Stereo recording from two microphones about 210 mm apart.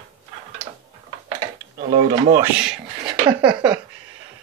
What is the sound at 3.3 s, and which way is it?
Speech, 20° right (ahead or behind).